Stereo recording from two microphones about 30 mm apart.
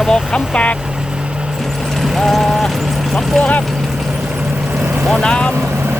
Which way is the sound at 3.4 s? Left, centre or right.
Left.